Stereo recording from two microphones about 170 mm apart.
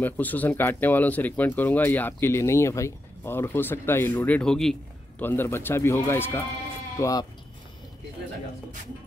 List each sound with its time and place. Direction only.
0.0 s speech: 10° left (ahead or behind)